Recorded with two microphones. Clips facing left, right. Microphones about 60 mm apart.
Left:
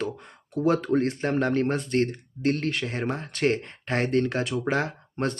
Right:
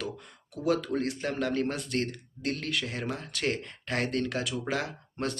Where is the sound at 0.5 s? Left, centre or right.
Left.